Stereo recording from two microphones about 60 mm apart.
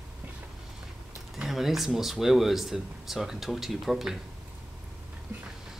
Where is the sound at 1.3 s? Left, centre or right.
Centre.